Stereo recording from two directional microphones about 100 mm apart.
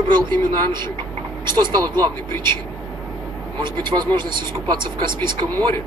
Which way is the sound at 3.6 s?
50° right (ahead or behind).